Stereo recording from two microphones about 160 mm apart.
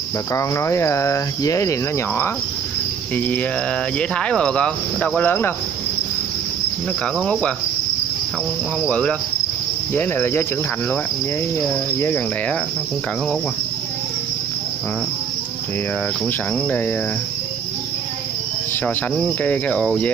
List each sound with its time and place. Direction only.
0.3 s speech: 20° left (ahead or behind)
7.2 s speech: 5° left (ahead or behind)
8.8 s speech: 5° left (ahead or behind)
12.0 s speech: 15° left (ahead or behind)
19.1 s speech: 5° left (ahead or behind)